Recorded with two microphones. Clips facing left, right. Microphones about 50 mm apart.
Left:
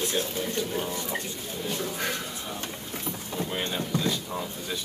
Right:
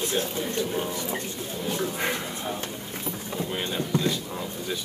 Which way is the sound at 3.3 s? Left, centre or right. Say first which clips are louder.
Even; centre.